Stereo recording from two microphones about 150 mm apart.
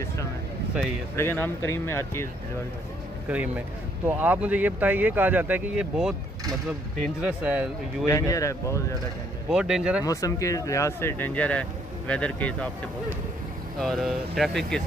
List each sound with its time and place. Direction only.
1.1 s speech: 15° left (ahead or behind)
3.3 s speech: 10° right (ahead or behind)
7.2 s speech: 5° right (ahead or behind)
8.1 s speech: 20° left (ahead or behind)
9.5 s speech: 5° right (ahead or behind)
10.0 s speech: 20° left (ahead or behind)
13.7 s speech: centre (ahead or behind)